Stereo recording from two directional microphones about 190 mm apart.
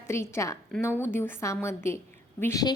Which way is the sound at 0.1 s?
15° left (ahead or behind).